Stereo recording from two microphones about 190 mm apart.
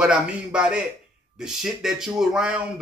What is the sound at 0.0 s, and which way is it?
Speech, 5° right (ahead or behind).